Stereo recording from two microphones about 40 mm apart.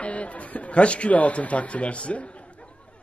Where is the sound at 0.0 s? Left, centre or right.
Left.